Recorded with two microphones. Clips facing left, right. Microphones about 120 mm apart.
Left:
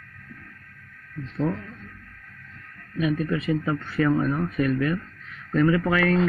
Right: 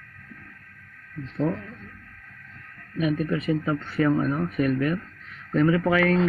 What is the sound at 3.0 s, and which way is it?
Speech, 20° right (ahead or behind).